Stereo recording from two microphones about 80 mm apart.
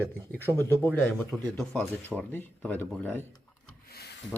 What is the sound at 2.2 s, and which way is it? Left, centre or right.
Speech, centre.